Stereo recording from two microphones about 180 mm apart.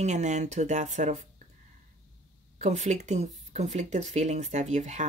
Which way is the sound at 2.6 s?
40° right (ahead or behind).